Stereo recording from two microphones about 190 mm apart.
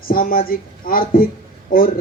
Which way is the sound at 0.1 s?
50° left (ahead or behind).